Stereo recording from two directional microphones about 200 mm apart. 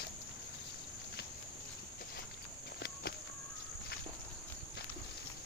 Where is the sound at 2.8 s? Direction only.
55° left (ahead or behind).